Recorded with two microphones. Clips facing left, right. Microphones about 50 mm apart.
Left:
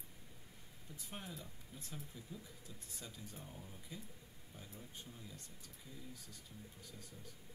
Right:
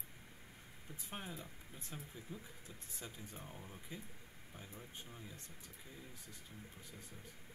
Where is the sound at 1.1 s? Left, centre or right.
Right.